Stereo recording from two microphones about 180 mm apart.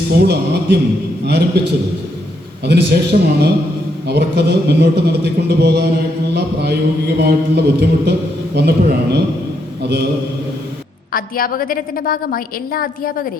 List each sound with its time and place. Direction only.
0.1 s a man's voice: 65° right (ahead or behind)
2.6 s a man's voice: 65° right (ahead or behind)
11.1 s a woman's voice: 55° left (ahead or behind)